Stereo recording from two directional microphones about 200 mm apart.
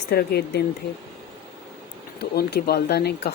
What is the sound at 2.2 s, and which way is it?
Speech, 55° left (ahead or behind).